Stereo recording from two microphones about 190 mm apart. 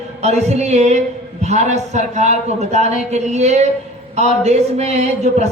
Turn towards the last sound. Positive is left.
turn(degrees=-35)  # may be behind; listen again after turning